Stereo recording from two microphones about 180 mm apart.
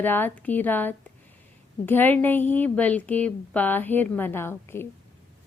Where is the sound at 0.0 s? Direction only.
10° left (ahead or behind).